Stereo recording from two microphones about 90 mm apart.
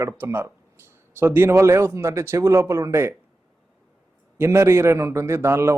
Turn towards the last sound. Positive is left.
turn(degrees=-30)  # may be behind; listen again after turning